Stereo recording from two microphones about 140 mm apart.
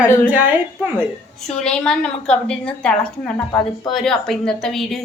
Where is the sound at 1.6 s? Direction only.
5° left (ahead or behind).